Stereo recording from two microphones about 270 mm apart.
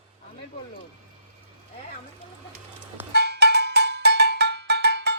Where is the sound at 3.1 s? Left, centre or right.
Right.